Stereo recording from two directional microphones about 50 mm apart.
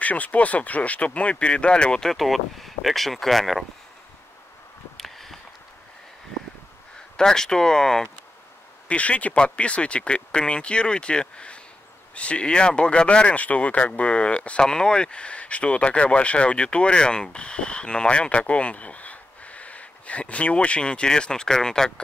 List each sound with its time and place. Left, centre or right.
0.0 s speech: left
2.1 s speech: centre
4.9 s a sound: centre
7.2 s speech: centre
8.8 s speech: left